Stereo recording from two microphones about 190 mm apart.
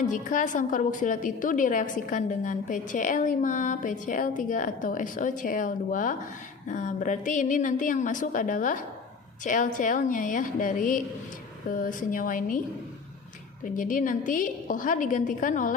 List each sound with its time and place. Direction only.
0.0 s a woman's voice: 40° left (ahead or behind)
13.7 s a woman's voice: 45° left (ahead or behind)